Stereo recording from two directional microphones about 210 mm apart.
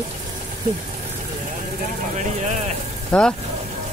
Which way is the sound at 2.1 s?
35° right (ahead or behind).